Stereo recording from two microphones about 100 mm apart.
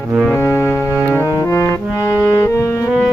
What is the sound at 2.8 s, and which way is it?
Music, 5° right (ahead or behind).